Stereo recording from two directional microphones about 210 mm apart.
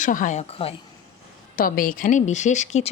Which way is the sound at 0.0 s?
40° left (ahead or behind).